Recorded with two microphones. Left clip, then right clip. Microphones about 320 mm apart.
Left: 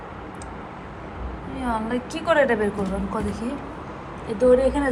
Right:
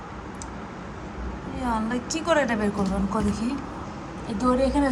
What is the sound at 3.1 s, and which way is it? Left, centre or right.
Speech, right.